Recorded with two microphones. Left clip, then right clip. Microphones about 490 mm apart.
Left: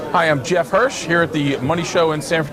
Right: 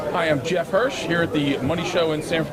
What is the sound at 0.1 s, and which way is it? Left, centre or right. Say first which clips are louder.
Speech: left 6 dB; left.